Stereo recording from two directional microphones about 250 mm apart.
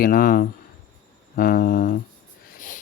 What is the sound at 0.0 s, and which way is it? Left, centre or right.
Speech, left.